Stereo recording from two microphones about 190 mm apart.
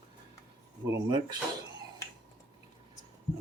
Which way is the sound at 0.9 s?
25° right (ahead or behind).